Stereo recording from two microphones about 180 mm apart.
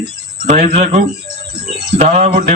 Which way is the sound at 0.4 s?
40° right (ahead or behind).